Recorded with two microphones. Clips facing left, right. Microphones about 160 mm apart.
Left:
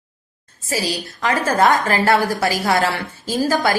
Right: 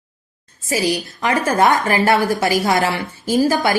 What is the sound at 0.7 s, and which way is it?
A woman's voice, 15° right (ahead or behind).